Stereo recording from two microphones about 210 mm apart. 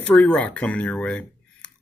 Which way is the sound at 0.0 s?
5° left (ahead or behind).